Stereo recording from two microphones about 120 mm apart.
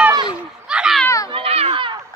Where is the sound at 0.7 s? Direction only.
5° right (ahead or behind).